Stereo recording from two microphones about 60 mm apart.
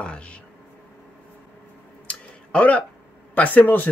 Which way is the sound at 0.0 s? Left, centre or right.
Centre.